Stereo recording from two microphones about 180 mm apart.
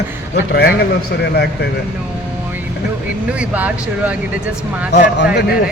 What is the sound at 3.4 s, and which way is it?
Speech, 10° right (ahead or behind).